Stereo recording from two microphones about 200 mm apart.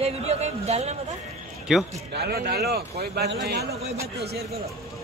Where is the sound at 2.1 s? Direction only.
50° right (ahead or behind).